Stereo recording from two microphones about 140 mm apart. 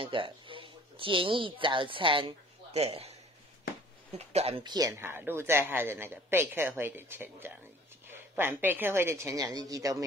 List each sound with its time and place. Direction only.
0.0 s speech: 40° right (ahead or behind)
4.3 s speech: 45° right (ahead or behind)
4.6 s speech: 25° right (ahead or behind)